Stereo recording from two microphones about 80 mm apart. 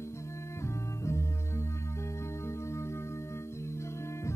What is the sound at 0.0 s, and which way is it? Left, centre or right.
Music, left.